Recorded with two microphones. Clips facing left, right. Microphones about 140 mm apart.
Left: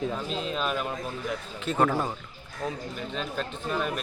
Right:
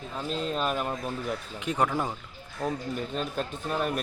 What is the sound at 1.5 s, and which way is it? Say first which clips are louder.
Speech: left 3 dB; 15° right (ahead or behind).